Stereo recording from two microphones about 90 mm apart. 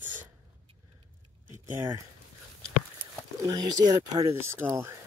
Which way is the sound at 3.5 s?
50° right (ahead or behind).